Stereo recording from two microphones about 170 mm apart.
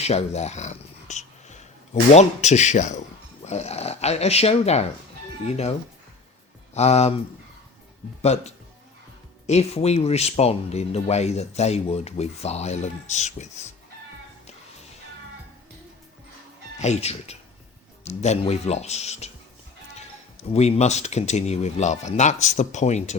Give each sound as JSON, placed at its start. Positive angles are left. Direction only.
{"t": 0.0, "sound": "purr", "side_deg": 40}
{"t": 2.1, "sound": "speech", "side_deg": 40}
{"t": 6.7, "sound": "speech", "side_deg": 40}
{"t": 8.2, "sound": "speech", "side_deg": 40}
{"t": 16.8, "sound": "speech", "side_deg": 40}
{"t": 20.5, "sound": "speech", "side_deg": 40}